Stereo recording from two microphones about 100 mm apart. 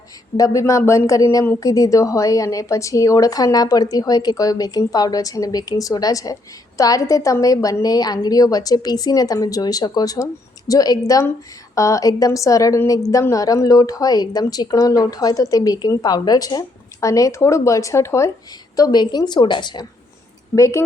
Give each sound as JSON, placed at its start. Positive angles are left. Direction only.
{"t": 0.3, "sound": "speech", "side_deg": 35}
{"t": 18.8, "sound": "a woman's voice", "side_deg": 45}
{"t": 20.6, "sound": "speech", "side_deg": 35}